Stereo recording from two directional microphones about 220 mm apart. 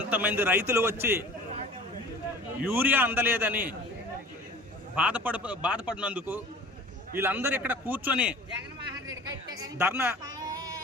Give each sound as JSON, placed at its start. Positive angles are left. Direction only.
{"t": 0.1, "sound": "a man's voice", "side_deg": -10}
{"t": 2.6, "sound": "a man's voice", "side_deg": -10}
{"t": 4.9, "sound": "a man's voice", "side_deg": -5}
{"t": 9.0, "sound": "a sound", "side_deg": -15}